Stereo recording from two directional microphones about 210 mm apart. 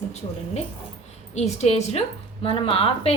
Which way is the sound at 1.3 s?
30° left (ahead or behind).